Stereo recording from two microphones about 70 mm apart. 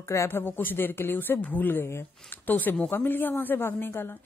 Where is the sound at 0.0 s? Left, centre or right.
Left.